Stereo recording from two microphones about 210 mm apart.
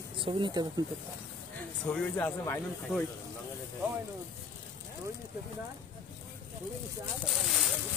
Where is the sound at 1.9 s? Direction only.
5° left (ahead or behind).